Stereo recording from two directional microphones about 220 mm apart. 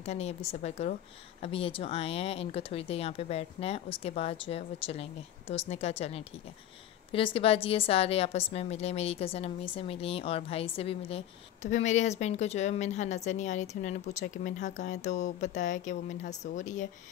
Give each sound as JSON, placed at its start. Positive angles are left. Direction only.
{"t": 0.0, "sound": "a woman's voice", "side_deg": 30}